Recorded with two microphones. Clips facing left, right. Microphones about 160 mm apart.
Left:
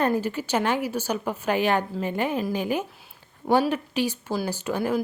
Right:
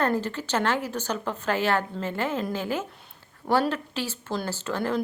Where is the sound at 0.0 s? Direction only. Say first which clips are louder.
Left 2 dB; 10° left (ahead or behind).